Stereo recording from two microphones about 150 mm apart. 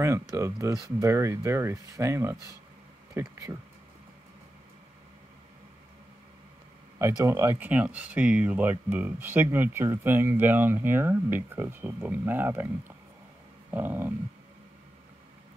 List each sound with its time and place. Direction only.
0.0 s speech: 20° right (ahead or behind)
7.0 s speech: 20° right (ahead or behind)